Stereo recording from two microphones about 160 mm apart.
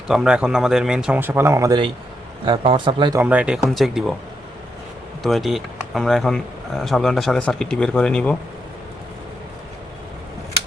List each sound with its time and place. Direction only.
0.1 s speech: 5° right (ahead or behind); by 1.8 s 20° right (ahead or behind)
2.4 s speech: 30° right (ahead or behind)
3.2 s speech: 10° right (ahead or behind)
5.2 s speech: centre (ahead or behind)